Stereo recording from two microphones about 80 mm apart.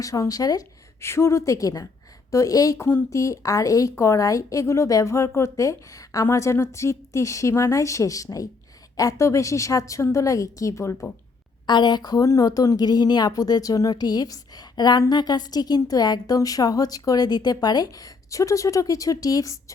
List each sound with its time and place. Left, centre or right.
0.0 s a woman's voice: left
1.0 s a woman's voice: left
2.8 s a woman's voice: left
11.6 s a woman's voice: left
13.9 s a woman's voice: left